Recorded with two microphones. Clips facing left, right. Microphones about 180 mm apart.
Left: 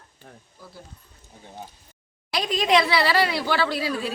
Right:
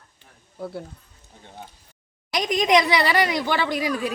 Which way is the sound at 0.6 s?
65° right (ahead or behind).